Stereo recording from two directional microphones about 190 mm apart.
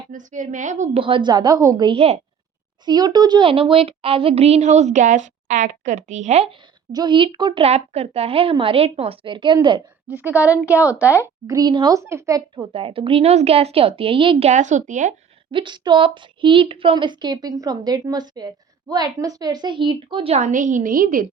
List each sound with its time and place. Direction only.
0.1 s a child's voice: 40° right (ahead or behind)
1.0 s a woman's voice: 25° right (ahead or behind)
10.1 s speech: 10° right (ahead or behind)
12.7 s a child's voice: 30° right (ahead or behind)
15.5 s a woman's voice: 25° right (ahead or behind); by 21.2 s 45° right (ahead or behind)